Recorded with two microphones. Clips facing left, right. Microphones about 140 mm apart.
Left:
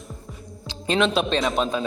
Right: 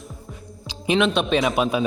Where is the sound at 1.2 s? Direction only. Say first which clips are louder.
Right 2 dB; 5° right (ahead or behind).